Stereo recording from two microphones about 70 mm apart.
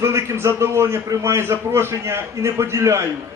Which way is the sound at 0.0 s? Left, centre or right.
Right.